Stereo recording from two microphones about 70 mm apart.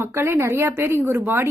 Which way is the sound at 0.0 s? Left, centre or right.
Right.